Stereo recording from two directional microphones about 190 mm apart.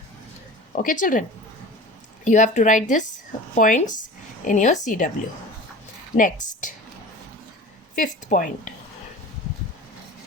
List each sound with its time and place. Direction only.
0.8 s speech: 45° left (ahead or behind)
2.2 s speech: 40° left (ahead or behind)
6.1 s speech: 45° left (ahead or behind)
7.9 s speech: 45° left (ahead or behind)